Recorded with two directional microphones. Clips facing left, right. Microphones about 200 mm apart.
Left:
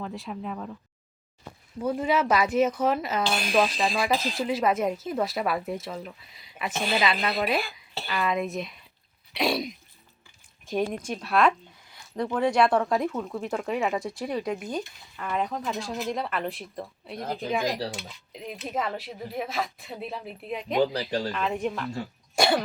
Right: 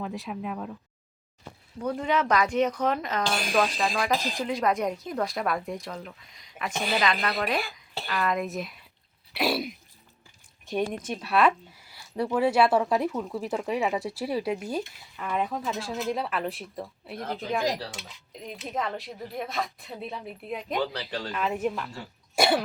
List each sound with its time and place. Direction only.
0.0 s a woman's voice: centre (ahead or behind)
1.8 s a woman's voice: 5° left (ahead or behind)
20.8 s speech: 15° left (ahead or behind)
21.3 s a woman's voice: 5° right (ahead or behind)